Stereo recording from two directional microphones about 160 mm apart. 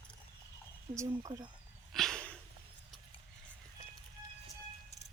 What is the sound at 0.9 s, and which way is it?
Speech, 20° right (ahead or behind).